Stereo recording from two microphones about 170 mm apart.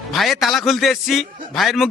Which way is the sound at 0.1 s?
Centre (ahead or behind).